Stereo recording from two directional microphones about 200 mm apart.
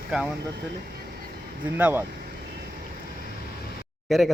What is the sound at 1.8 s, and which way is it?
Speech, 5° right (ahead or behind).